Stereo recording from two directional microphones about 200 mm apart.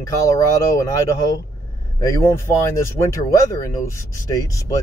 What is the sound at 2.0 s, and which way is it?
Speech, 15° left (ahead or behind).